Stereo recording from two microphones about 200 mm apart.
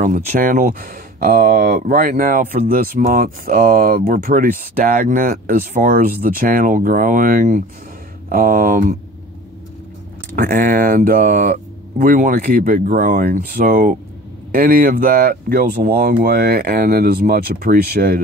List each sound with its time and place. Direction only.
0.0 s speech: 40° right (ahead or behind)
10.3 s speech: 45° right (ahead or behind)